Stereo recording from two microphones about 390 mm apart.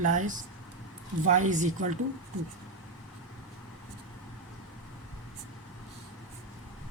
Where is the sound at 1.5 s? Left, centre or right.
Centre.